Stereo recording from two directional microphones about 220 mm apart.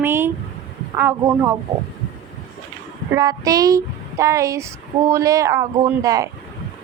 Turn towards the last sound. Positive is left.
turn(degrees=-15)  # may be behind; listen again after turning